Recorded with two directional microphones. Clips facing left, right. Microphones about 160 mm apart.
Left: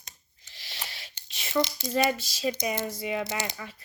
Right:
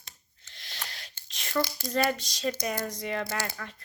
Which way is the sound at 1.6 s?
20° left (ahead or behind).